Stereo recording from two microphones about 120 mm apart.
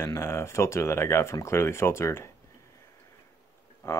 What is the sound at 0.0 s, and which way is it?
Speech, 20° left (ahead or behind).